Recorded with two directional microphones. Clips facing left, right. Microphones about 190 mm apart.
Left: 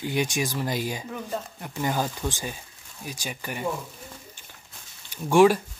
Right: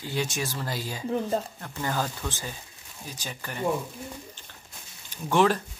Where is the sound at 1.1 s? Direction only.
35° right (ahead or behind).